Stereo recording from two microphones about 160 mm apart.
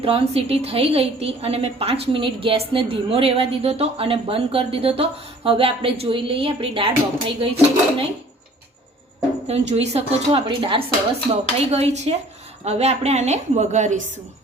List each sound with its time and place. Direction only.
0.0 s a woman's voice: 35° right (ahead or behind)
9.5 s a woman's voice: 40° right (ahead or behind)